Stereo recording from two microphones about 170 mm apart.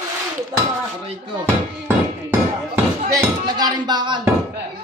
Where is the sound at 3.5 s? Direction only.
25° right (ahead or behind).